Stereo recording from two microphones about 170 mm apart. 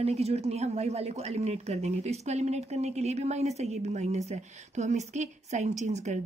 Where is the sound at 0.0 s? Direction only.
40° right (ahead or behind).